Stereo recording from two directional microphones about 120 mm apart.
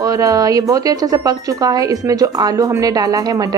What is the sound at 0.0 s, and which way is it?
Speech, 30° right (ahead or behind).